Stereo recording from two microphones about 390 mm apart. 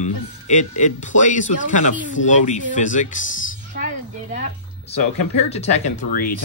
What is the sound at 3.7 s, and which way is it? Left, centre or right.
Speech, centre.